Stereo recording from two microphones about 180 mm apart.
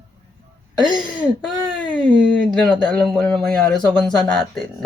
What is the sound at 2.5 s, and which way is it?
Speech, 5° left (ahead or behind).